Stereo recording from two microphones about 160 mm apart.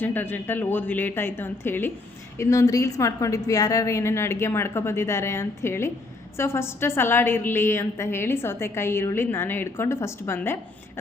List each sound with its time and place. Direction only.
0.0 s a woman's voice: 10° left (ahead or behind)